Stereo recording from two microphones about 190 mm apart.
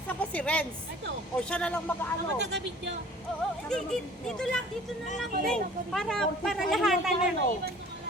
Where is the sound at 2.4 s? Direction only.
65° right (ahead or behind).